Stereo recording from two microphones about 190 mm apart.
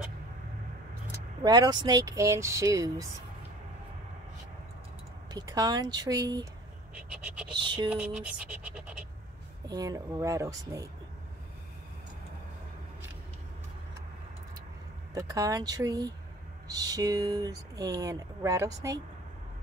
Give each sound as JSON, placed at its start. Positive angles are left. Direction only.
{"t": 1.4, "sound": "speech", "side_deg": -20}
{"t": 5.3, "sound": "speech", "side_deg": -20}
{"t": 7.0, "sound": "speech", "side_deg": -5}
{"t": 7.5, "sound": "speech", "side_deg": -25}
{"t": 7.9, "sound": "speech", "side_deg": -5}
{"t": 9.7, "sound": "speech", "side_deg": -20}
{"t": 15.1, "sound": "speech", "side_deg": -20}